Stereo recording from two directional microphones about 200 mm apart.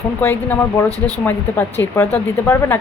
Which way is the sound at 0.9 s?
15° right (ahead or behind).